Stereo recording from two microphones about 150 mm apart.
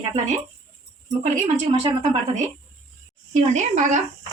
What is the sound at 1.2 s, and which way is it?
Speech, 45° right (ahead or behind).